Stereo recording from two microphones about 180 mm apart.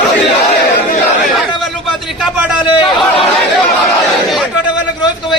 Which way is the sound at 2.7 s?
25° left (ahead or behind).